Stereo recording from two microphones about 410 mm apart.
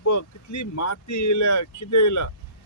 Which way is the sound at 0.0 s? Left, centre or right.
Left.